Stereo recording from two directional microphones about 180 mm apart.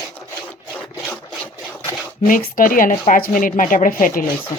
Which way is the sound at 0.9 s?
15° left (ahead or behind).